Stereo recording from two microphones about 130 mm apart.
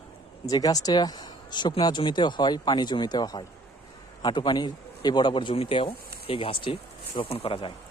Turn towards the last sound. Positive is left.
turn(degrees=45)  # may be behind; listen again after turning